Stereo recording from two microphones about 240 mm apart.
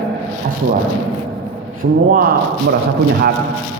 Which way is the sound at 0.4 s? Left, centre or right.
Right.